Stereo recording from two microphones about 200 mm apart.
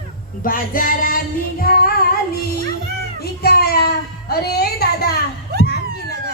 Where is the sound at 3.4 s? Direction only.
50° left (ahead or behind).